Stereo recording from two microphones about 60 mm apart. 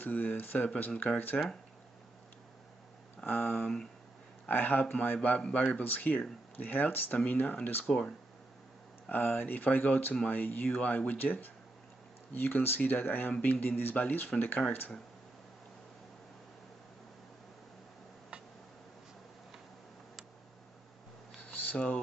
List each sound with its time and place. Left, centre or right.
0.0 s speech: left
3.3 s speech: left
7.8 s speech: centre
9.1 s speech: left
21.4 s a sound: left